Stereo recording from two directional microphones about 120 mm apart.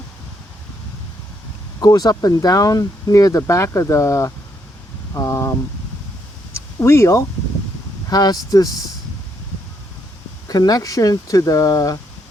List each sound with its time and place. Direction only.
1.8 s speech: 35° left (ahead or behind)
6.5 s a sound: 20° left (ahead or behind)
8.1 s speech: 30° left (ahead or behind)
10.5 s speech: 30° left (ahead or behind)